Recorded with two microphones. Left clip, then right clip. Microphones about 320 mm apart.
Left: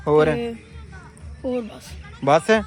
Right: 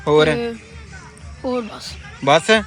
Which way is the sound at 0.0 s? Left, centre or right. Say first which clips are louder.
Right 3 dB; centre.